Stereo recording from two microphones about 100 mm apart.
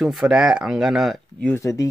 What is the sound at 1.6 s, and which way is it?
Speech, 30° left (ahead or behind).